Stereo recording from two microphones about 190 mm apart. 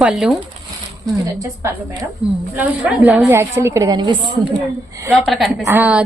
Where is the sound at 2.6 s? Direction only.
5° right (ahead or behind); by 4.3 s 25° right (ahead or behind).